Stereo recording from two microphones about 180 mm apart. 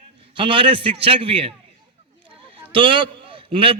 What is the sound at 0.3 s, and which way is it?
A man's voice, 30° right (ahead or behind).